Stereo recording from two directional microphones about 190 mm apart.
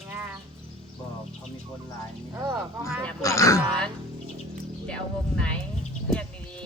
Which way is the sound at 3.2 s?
15° left (ahead or behind).